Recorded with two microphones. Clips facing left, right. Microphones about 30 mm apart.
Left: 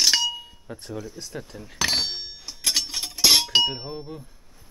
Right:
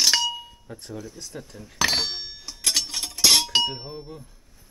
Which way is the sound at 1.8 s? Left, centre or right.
Centre.